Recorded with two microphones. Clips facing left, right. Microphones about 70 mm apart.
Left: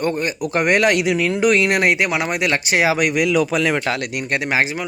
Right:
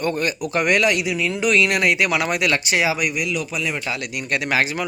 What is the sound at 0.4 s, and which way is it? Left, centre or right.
Speech, left.